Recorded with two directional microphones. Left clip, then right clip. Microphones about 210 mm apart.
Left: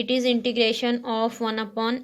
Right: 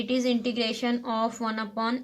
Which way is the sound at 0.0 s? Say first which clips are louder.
Left 4 dB; 25° left (ahead or behind).